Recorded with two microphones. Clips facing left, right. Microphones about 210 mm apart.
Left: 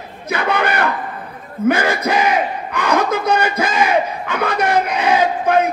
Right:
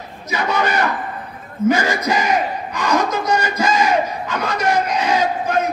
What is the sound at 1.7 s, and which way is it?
Battle cry, 55° left (ahead or behind).